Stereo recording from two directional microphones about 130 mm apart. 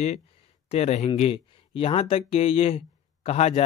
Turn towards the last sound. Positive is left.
turn(degrees=55)  # may be behind; listen again after turning